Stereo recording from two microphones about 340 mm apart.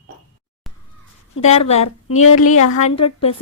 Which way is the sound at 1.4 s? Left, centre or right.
Centre.